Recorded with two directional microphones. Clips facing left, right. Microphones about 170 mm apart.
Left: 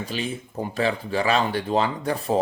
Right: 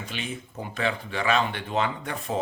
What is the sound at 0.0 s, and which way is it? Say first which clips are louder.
Speech: left 5 dB; 35° left (ahead or behind).